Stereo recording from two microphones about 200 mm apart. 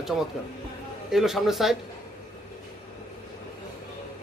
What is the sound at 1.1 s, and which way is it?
Speech, centre (ahead or behind).